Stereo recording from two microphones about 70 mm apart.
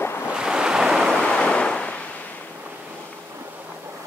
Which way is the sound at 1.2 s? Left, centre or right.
Centre.